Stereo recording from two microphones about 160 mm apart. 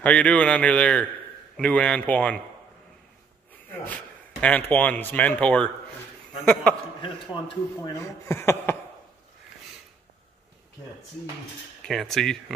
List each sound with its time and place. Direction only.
0.0 s speech: 10° left (ahead or behind)
3.8 s speech: 10° left (ahead or behind)
7.0 s speech: 30° left (ahead or behind)
8.0 s speech: 15° left (ahead or behind)
11.8 s speech: centre (ahead or behind)